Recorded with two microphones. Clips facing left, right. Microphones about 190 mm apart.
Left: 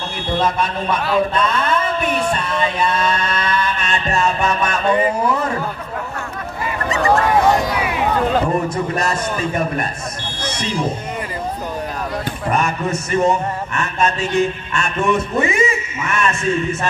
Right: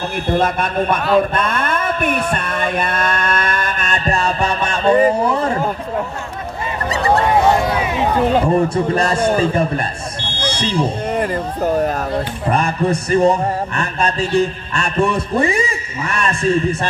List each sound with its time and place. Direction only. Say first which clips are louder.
0.4 s a man's voice: even; 55° right (ahead or behind); by 5.6 s 35° right (ahead or behind)
6.9 s a sound: even; 35° right (ahead or behind)
8.6 s music: right 4 dB; 30° right (ahead or behind)
10.4 s buzzer: right 4 dB; 30° right (ahead or behind)
12.4 s music: right 2 dB; 35° right (ahead or behind)